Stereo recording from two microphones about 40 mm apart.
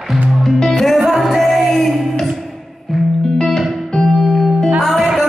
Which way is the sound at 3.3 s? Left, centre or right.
Centre.